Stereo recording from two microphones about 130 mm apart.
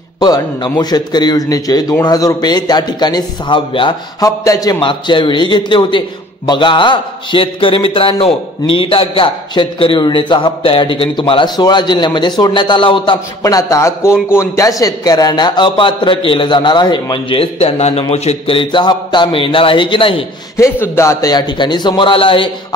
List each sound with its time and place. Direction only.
0.2 s a man's voice: 30° left (ahead or behind)
4.2 s a man's voice: 30° left (ahead or behind)
4.7 s a man's voice: 40° left (ahead or behind)
13.4 s a man's voice: 25° left (ahead or behind); by 20.2 s 45° left (ahead or behind)
20.5 s a man's voice: 20° left (ahead or behind); by 22.8 s 40° left (ahead or behind)